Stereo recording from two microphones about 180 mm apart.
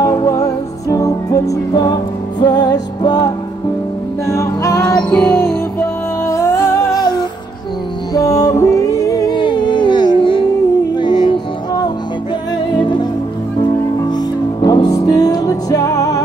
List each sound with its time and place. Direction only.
0.0 s music: 20° left (ahead or behind)
4.9 s music: 5° left (ahead or behind); by 11.3 s 25° left (ahead or behind)
12.7 s music: 25° left (ahead or behind)